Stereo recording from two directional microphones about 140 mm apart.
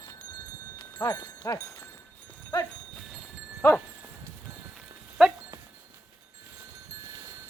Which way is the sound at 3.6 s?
20° left (ahead or behind).